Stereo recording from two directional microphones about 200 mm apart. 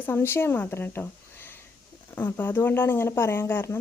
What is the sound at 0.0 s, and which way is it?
A woman's voice, 10° left (ahead or behind).